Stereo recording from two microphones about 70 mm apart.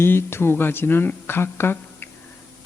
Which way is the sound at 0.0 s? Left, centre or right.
Left.